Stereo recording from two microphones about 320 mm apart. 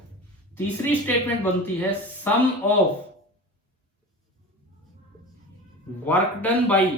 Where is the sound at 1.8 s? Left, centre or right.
Centre.